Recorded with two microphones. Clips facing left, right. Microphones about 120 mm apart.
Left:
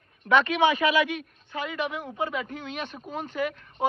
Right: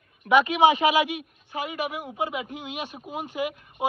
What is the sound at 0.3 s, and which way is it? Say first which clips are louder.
Speech: right 3 dB; 10° right (ahead or behind).